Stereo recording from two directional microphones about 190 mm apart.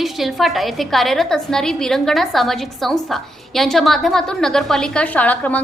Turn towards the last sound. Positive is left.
turn(degrees=10)  # may be behind; listen again after turning